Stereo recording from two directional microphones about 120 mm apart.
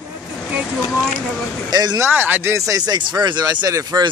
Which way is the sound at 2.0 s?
15° right (ahead or behind).